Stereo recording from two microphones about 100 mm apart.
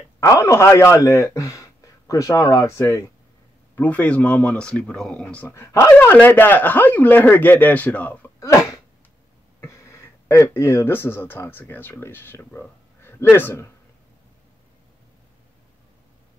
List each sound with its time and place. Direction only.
0.2 s a man's voice: 30° left (ahead or behind)
3.7 s speech: 15° left (ahead or behind)
5.5 s a man's voice: 30° left (ahead or behind)
9.6 s a man's voice: 25° left (ahead or behind)